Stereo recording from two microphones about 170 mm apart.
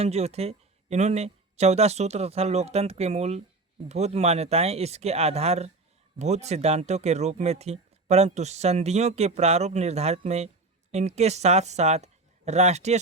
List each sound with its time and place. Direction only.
0.0 s speech: 40° right (ahead or behind)